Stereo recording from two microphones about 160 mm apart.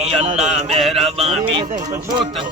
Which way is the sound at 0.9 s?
40° right (ahead or behind).